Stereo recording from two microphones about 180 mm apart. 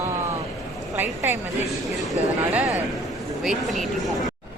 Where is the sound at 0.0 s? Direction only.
15° right (ahead or behind).